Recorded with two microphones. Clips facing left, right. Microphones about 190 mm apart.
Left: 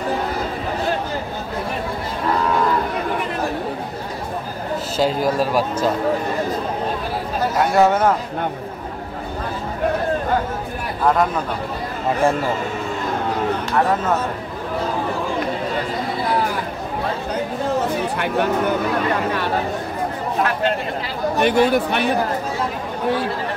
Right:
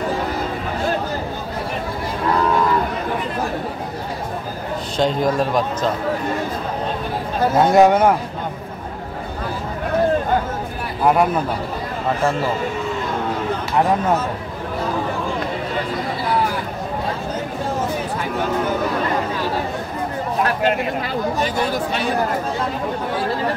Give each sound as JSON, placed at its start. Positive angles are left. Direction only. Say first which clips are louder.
{"t": 4.9, "sound": "speech", "louder": "right 1 dB", "side_deg": 5}
{"t": 7.5, "sound": "a man's voice", "louder": "right 3 dB", "side_deg": -20}
{"t": 11.1, "sound": "a man's voice", "louder": "right 2 dB", "side_deg": -10}
{"t": 21.4, "sound": "speech", "louder": "left 5 dB", "side_deg": 65}